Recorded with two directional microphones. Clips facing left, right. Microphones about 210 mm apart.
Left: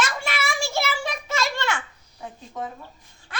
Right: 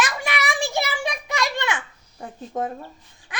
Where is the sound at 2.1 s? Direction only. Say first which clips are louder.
Right 5 dB; 50° right (ahead or behind).